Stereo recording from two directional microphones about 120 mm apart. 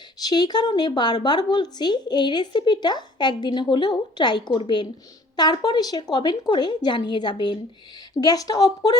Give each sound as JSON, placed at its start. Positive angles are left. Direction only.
{"t": 0.2, "sound": "a woman's voice", "side_deg": 35}